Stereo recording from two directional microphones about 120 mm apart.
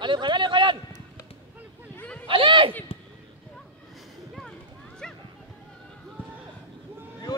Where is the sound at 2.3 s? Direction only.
45° right (ahead or behind).